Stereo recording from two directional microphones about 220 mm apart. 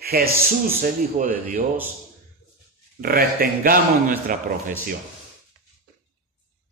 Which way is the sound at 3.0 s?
40° right (ahead or behind).